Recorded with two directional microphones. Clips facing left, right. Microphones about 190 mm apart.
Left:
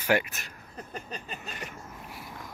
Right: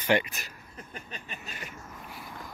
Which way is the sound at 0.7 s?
35° left (ahead or behind).